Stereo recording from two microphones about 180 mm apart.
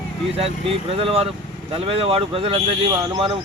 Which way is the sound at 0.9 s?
30° right (ahead or behind).